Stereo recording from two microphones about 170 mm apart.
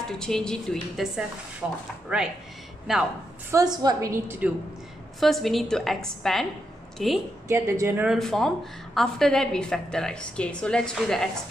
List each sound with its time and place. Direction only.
0.2 s a woman's voice: 5° left (ahead or behind)
3.5 s a woman's voice: 20° right (ahead or behind)
5.2 s a woman's voice: centre (ahead or behind)
7.4 s speech: 15° right (ahead or behind)
8.2 s a woman's voice: centre (ahead or behind)